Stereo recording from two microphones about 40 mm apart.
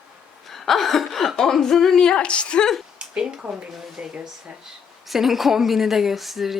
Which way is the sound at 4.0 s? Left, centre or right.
Right.